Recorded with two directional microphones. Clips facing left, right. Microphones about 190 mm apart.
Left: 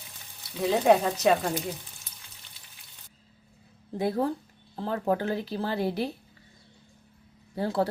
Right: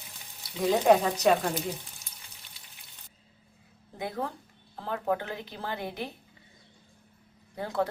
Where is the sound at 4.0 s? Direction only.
35° left (ahead or behind).